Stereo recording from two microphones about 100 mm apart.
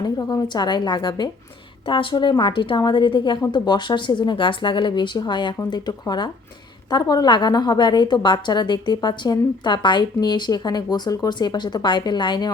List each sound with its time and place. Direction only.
0.0 s a woman's voice: 40° left (ahead or behind)